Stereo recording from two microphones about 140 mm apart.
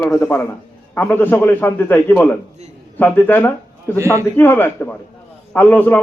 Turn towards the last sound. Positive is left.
turn(degrees=10)  # may be behind; listen again after turning